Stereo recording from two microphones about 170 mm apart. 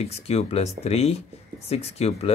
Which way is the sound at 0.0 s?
40° left (ahead or behind).